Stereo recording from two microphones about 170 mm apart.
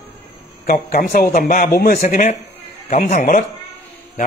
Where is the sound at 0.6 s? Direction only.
50° left (ahead or behind).